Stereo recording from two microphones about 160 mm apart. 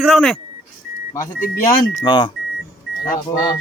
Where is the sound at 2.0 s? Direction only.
30° left (ahead or behind).